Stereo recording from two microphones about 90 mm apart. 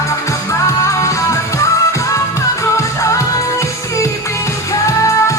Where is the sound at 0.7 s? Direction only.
35° left (ahead or behind).